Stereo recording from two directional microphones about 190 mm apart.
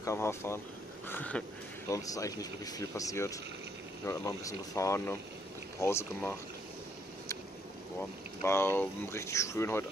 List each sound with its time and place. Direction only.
0.0 s speech: 15° left (ahead or behind)
8.4 s speech: 15° left (ahead or behind)